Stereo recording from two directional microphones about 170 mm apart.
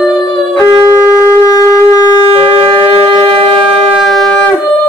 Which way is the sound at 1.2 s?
20° left (ahead or behind).